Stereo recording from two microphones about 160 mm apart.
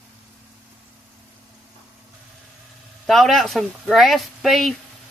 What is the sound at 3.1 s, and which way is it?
Speech, centre (ahead or behind).